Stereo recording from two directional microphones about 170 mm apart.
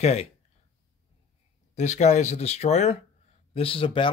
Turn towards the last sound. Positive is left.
turn(degrees=30)  # may be behind; listen again after turning